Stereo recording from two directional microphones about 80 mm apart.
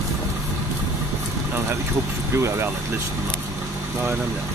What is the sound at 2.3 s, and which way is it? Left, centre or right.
Speech, right.